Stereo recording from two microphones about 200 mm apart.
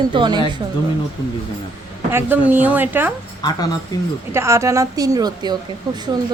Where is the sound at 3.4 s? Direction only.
20° left (ahead or behind).